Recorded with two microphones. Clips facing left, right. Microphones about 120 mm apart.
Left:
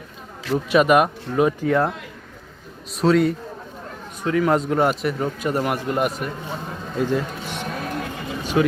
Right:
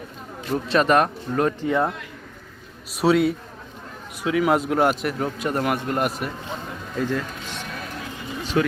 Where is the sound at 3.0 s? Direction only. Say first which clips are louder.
Left 1 dB; 5° right (ahead or behind).